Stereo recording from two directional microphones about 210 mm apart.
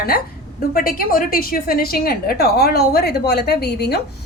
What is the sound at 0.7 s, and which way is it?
A woman's voice, 45° left (ahead or behind).